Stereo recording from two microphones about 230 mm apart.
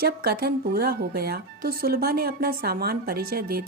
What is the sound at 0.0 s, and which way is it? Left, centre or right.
A woman's voice, right.